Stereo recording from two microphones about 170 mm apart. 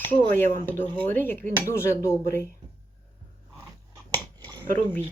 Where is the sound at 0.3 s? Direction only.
10° left (ahead or behind).